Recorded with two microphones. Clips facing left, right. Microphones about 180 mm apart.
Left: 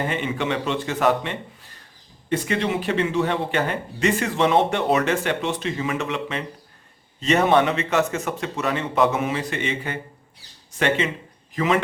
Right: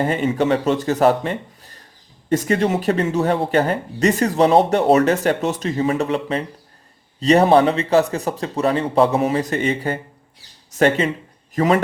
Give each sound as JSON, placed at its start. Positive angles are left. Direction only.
{"t": 0.0, "sound": "speech", "side_deg": -40}